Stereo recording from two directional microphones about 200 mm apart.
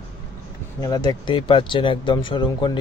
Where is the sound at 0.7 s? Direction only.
15° left (ahead or behind).